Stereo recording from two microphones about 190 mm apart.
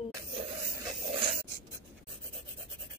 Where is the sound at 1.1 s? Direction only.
30° right (ahead or behind).